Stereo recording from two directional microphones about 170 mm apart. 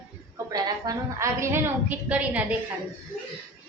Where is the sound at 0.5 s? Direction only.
20° right (ahead or behind).